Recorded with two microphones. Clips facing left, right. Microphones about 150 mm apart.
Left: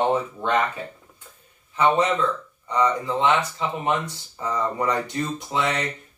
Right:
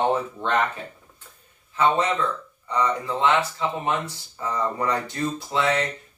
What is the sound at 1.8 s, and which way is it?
Speech, 15° left (ahead or behind).